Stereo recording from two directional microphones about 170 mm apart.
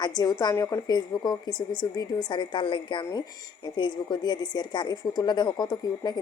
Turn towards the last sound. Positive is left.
turn(degrees=25)  # may be behind; listen again after turning